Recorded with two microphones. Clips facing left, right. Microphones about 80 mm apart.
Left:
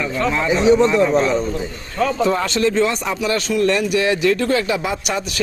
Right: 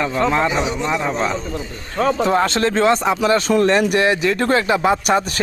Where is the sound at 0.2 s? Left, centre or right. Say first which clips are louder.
Even; right.